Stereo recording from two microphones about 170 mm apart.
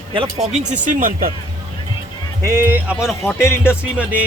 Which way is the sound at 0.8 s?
50° right (ahead or behind).